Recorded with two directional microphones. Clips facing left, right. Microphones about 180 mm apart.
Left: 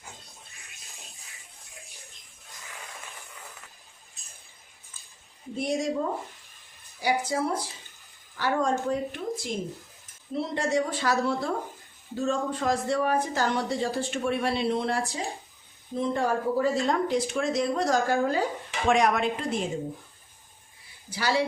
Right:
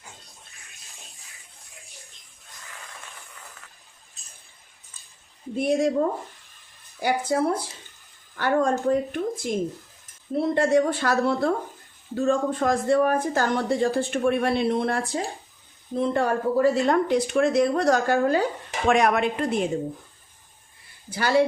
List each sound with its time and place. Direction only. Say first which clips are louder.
5.5 s a woman's voice: right 6 dB; 60° right (ahead or behind)
7.0 s a woman's voice: right 4 dB; 55° right (ahead or behind)
16.1 s a woman's voice: right 3 dB; 65° right (ahead or behind)
21.1 s speech: right 6 dB; 55° right (ahead or behind)